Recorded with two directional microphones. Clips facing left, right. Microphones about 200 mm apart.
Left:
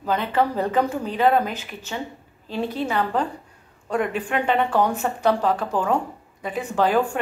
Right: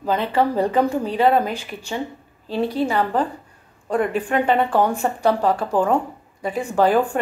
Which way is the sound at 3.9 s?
40° right (ahead or behind).